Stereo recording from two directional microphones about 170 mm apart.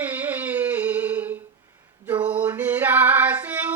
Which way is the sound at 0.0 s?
10° right (ahead or behind).